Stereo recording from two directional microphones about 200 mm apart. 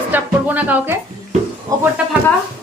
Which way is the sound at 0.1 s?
10° right (ahead or behind).